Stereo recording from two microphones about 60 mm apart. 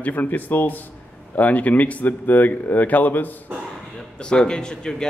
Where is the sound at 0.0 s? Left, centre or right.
Left.